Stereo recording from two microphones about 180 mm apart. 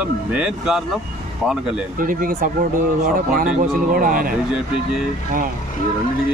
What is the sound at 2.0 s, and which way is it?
Speech, 50° right (ahead or behind).